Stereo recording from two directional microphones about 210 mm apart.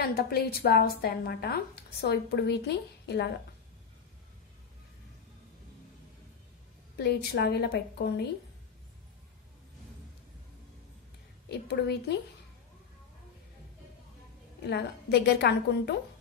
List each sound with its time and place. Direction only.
0.0 s a woman's voice: 45° left (ahead or behind)
7.0 s a woman's voice: 50° left (ahead or behind)
11.4 s a woman's voice: 50° left (ahead or behind)
14.6 s a woman's voice: 50° left (ahead or behind)